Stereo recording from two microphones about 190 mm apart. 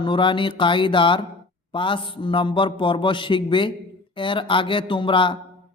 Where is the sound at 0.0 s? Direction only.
25° left (ahead or behind).